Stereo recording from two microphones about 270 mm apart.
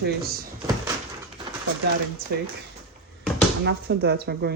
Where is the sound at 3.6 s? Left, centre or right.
Right.